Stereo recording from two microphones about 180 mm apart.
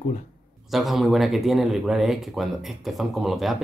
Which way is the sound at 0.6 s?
Centre (ahead or behind).